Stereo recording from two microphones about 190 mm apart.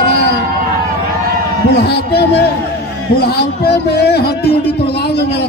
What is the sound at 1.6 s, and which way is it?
A man's voice, 60° left (ahead or behind).